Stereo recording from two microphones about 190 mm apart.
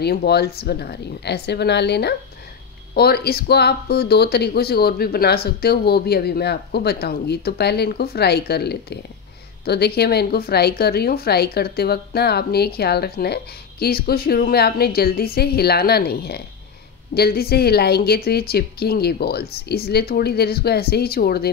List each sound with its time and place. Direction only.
0.0 s speech: 55° left (ahead or behind)